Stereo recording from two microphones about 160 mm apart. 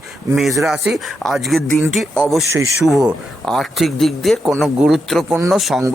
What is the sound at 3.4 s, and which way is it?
Speech, centre (ahead or behind).